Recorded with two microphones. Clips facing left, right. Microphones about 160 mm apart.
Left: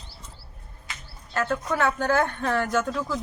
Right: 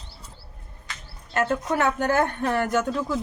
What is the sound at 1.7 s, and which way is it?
Speech, 15° right (ahead or behind).